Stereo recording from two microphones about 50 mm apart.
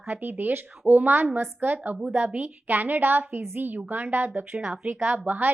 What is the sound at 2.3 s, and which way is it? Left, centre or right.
A woman's voice, right.